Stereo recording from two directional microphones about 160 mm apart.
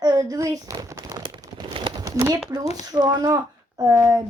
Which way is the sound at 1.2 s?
30° right (ahead or behind).